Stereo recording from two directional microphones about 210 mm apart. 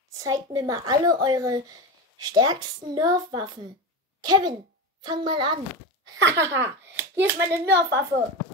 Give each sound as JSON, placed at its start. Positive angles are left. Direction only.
{"t": 0.1, "sound": "a child's voice", "side_deg": -15}
{"t": 6.1, "sound": "a woman's voice", "side_deg": -60}
{"t": 6.4, "sound": "speech", "side_deg": -10}
{"t": 7.6, "sound": "a woman's voice", "side_deg": -55}